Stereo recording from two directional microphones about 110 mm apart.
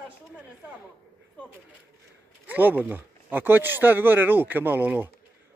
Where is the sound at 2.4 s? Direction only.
15° right (ahead or behind).